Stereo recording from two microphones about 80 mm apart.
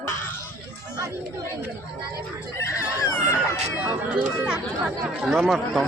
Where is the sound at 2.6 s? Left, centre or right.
Left.